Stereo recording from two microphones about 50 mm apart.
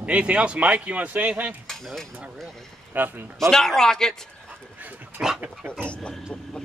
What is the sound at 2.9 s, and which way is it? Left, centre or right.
Speech, right.